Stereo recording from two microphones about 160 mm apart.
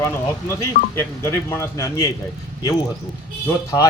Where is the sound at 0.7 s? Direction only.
90° left.